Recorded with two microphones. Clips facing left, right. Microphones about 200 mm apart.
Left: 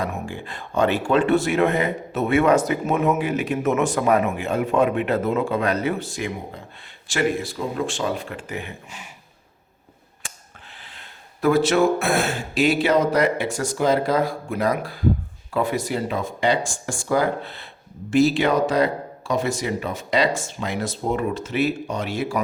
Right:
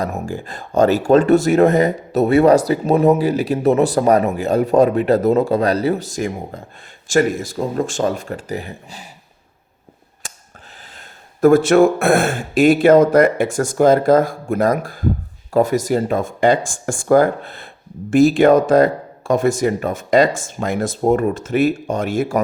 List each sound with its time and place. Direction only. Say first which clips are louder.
0.0 s speech: right 4 dB; 40° right (ahead or behind)
10.2 s a sound: right 3 dB; 40° right (ahead or behind)
10.9 s speech: right 3 dB; 45° right (ahead or behind)